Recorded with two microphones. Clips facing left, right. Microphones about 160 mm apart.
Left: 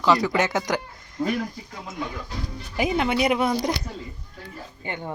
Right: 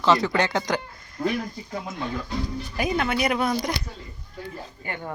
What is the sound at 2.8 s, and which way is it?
Speech, 20° left (ahead or behind).